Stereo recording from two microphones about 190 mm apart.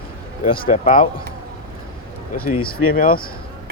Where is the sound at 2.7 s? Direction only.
50° left (ahead or behind).